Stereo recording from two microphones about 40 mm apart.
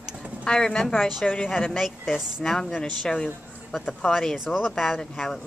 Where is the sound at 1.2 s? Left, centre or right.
Left.